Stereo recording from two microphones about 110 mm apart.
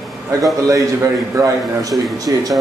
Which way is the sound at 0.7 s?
30° right (ahead or behind).